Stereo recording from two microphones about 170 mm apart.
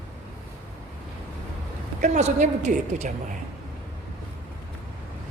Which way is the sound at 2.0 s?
45° right (ahead or behind).